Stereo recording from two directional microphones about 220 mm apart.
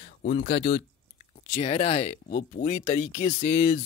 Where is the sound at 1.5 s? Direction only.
30° left (ahead or behind).